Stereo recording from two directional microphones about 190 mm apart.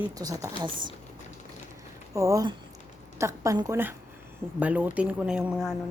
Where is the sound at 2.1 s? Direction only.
15° right (ahead or behind).